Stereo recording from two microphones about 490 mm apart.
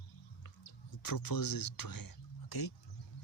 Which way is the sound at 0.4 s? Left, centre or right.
Left.